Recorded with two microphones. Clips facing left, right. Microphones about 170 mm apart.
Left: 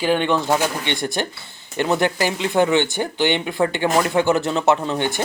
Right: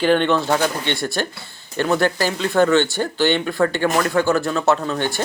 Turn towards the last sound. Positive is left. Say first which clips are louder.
# even
turn(degrees=15)  # may be behind; listen again after turning